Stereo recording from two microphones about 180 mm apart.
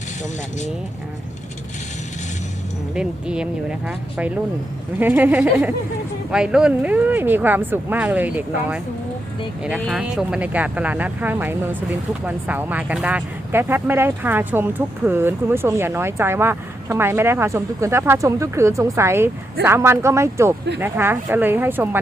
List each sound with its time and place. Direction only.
2.9 s speech: 5° right (ahead or behind)
9.8 s speech: 5° right (ahead or behind)